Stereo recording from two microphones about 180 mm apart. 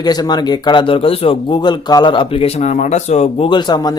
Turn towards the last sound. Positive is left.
turn(degrees=25)  # may be behind; listen again after turning